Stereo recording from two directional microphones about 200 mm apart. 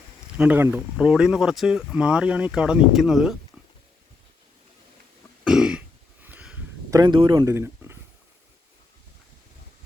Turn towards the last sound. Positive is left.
turn(degrees=-10)  # may be behind; listen again after turning